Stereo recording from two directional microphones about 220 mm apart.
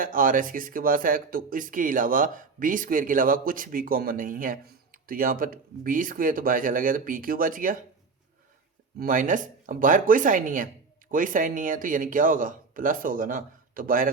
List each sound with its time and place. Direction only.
0.0 s speech: 40° right (ahead or behind)
9.0 s speech: 40° right (ahead or behind)